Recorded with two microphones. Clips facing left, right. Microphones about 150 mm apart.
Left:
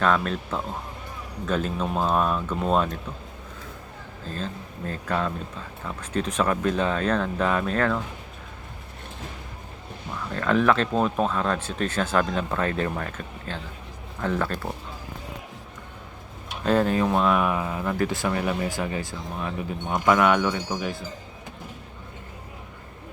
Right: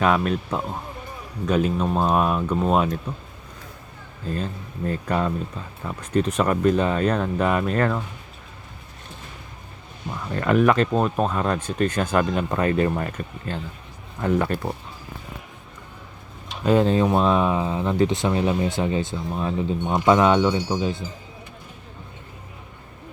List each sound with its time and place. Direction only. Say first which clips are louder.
0.0 s speech: right 3 dB; 10° right (ahead or behind)
4.9 s speech: right 3 dB; 5° right (ahead or behind)
10.1 s speech: right 3 dB; 10° right (ahead or behind)
16.8 s speech: right 3 dB; 25° right (ahead or behind)